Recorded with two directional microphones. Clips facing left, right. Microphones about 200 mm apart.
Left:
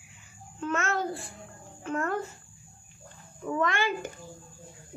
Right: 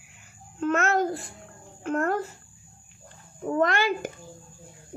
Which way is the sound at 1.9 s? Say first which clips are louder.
Right 5 dB; 50° right (ahead or behind).